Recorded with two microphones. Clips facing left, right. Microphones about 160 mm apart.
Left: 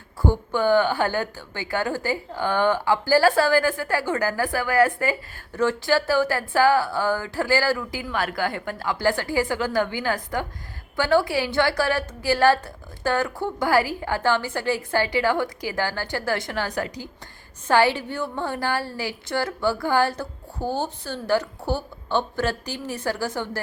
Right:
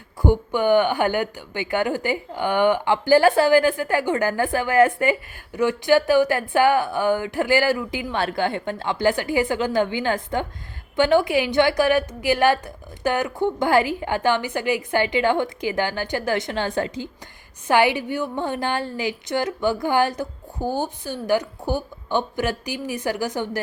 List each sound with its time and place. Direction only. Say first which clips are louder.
0.2 s a woman's voice: right 2 dB; 15° right (ahead or behind)